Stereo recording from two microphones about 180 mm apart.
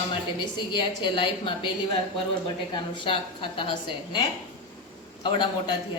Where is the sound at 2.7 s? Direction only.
25° left (ahead or behind).